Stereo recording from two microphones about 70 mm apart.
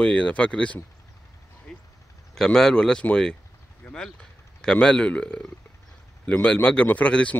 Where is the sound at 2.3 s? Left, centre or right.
Centre.